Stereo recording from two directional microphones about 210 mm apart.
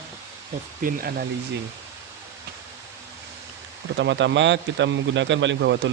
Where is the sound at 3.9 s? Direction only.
60° right (ahead or behind).